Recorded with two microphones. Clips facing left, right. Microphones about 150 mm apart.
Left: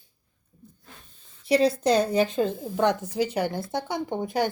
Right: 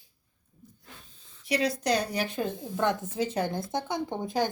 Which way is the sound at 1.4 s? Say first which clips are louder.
Left 6 dB; 30° left (ahead or behind).